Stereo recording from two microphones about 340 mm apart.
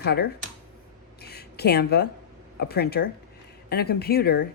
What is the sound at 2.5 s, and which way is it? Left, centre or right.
A man's voice, left.